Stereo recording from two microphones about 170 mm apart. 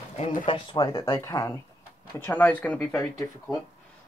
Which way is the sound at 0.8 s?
15° left (ahead or behind).